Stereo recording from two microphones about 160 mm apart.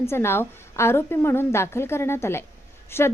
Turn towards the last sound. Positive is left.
turn(degrees=15)  # may be behind; listen again after turning